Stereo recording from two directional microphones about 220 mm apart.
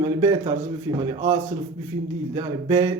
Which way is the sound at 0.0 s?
15° right (ahead or behind).